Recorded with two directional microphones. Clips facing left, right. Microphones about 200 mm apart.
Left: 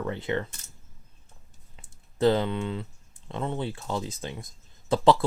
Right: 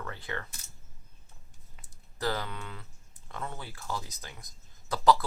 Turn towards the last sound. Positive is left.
turn(degrees=25)  # may be behind; listen again after turning